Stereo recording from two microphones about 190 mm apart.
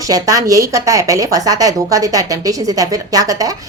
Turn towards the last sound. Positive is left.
turn(degrees=-20)  # may be behind; listen again after turning